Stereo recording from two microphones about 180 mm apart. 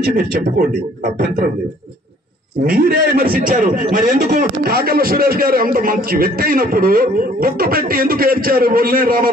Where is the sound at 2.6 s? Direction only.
50° right (ahead or behind).